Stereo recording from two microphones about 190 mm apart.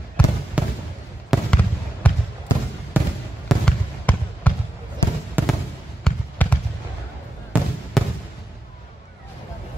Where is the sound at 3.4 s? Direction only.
5° left (ahead or behind).